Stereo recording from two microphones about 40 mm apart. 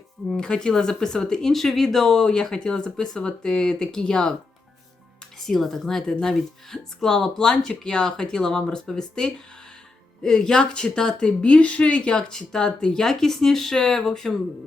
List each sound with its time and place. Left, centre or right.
0.3 s speech: centre
5.5 s speech: centre